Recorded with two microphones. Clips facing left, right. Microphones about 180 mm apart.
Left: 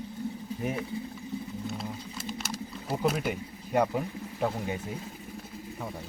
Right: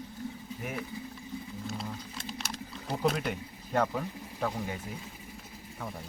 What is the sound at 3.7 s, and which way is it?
Speech, 15° left (ahead or behind).